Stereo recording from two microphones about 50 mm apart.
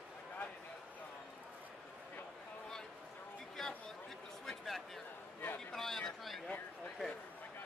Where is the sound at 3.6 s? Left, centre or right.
Centre.